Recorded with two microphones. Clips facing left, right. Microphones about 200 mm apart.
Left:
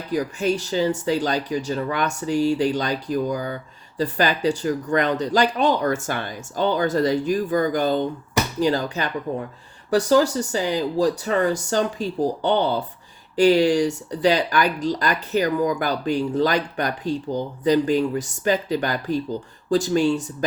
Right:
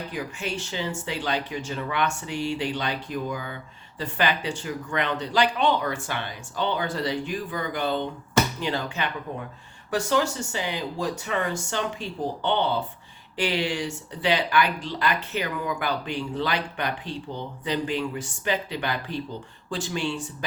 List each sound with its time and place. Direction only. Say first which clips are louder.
0.1 s speech: left 9 dB; 40° left (ahead or behind)